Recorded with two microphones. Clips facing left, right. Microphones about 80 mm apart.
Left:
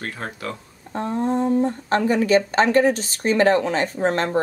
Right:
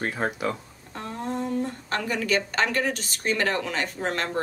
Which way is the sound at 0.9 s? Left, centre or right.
Left.